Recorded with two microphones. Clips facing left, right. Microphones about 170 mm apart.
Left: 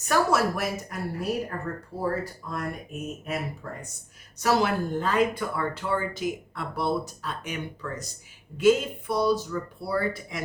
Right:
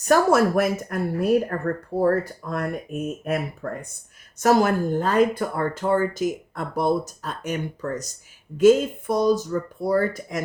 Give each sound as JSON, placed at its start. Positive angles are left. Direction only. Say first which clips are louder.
{"t": 0.1, "sound": "speech", "louder": "right 6 dB", "side_deg": -50}